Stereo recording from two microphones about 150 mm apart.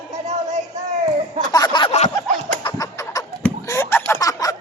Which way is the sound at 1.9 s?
45° left (ahead or behind).